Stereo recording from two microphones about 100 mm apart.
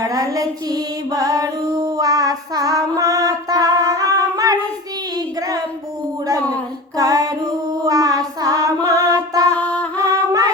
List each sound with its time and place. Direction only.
0.0 s child singing: 35° right (ahead or behind)
6.9 s female singing: 35° right (ahead or behind)
7.9 s child singing: 40° right (ahead or behind)
9.6 s music: 15° left (ahead or behind)
10.0 s music: 35° right (ahead or behind)